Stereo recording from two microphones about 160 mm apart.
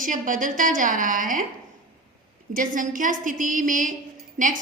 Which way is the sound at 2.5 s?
55° right (ahead or behind).